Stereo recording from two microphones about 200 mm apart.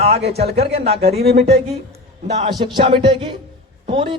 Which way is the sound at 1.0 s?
50° right (ahead or behind).